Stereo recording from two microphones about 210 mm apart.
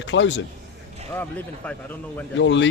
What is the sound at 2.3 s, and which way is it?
Speech, 60° left (ahead or behind).